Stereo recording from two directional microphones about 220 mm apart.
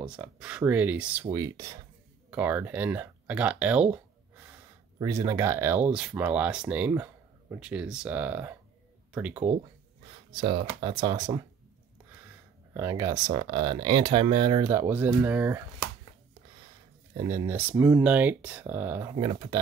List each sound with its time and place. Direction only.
0.0 s speech: 5° right (ahead or behind)
10.3 s speech: 25° right (ahead or behind)
12.7 s speech: 15° right (ahead or behind)
17.2 s speech: 15° right (ahead or behind)
19.1 s speech: 20° right (ahead or behind)